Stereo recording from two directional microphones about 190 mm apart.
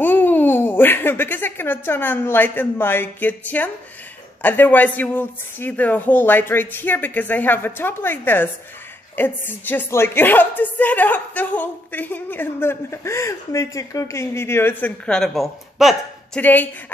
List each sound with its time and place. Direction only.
0.0 s a woman's voice: 10° left (ahead or behind)